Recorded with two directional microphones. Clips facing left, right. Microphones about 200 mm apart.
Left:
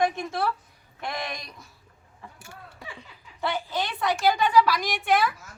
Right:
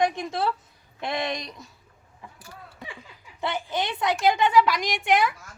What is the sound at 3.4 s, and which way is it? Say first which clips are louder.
A woman's voice: right 1 dB; 20° right (ahead or behind).